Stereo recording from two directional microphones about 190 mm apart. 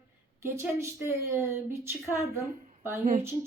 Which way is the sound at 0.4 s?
15° right (ahead or behind).